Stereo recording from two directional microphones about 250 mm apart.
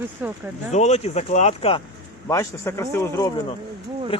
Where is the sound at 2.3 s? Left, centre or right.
Centre.